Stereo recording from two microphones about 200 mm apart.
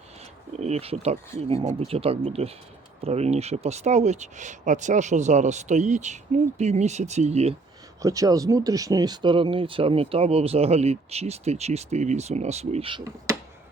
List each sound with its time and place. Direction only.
0.6 s speech: 30° right (ahead or behind)
8.0 s speech: 15° right (ahead or behind)
13.3 s a sound: 15° right (ahead or behind)